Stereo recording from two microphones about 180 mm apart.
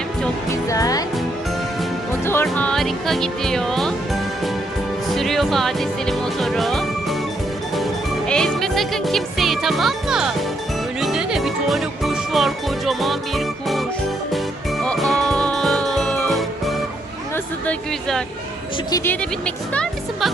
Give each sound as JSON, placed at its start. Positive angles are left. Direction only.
{"t": 0.7, "sound": "music", "side_deg": 20}
{"t": 2.2, "sound": "music", "side_deg": 10}
{"t": 8.3, "sound": "music", "side_deg": 5}
{"t": 17.3, "sound": "speech", "side_deg": 5}
{"t": 18.9, "sound": "music", "side_deg": 20}
{"t": 19.5, "sound": "speech", "side_deg": 5}